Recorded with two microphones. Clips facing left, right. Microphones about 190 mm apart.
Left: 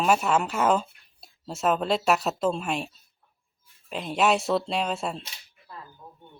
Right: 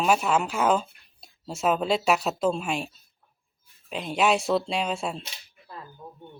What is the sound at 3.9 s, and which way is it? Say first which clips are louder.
Speech: even; centre (ahead or behind).